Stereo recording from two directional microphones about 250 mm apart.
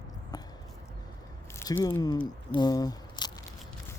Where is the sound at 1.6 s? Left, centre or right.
Centre.